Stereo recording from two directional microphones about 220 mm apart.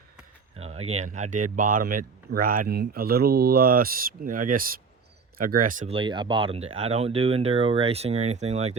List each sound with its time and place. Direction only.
0.5 s a sound: 25° right (ahead or behind)
1.1 s speech: 35° right (ahead or behind)
5.9 s speech: 20° right (ahead or behind)